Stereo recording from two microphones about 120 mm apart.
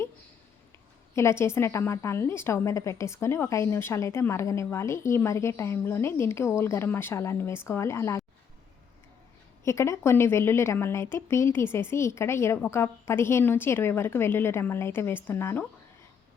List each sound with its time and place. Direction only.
1.1 s a woman's voice: 25° left (ahead or behind)
9.6 s a woman's voice: 25° left (ahead or behind)